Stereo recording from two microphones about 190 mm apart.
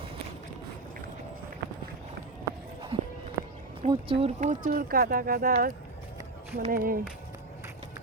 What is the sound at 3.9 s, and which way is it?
Speech, 30° right (ahead or behind).